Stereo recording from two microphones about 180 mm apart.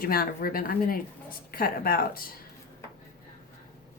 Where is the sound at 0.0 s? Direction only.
55° left (ahead or behind).